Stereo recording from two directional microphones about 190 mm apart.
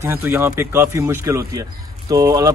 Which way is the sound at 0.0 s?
10° right (ahead or behind).